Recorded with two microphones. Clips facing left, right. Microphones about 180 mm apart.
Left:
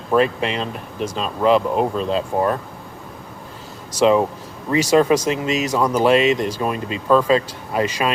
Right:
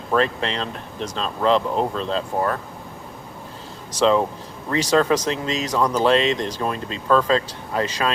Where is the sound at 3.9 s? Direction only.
10° left (ahead or behind).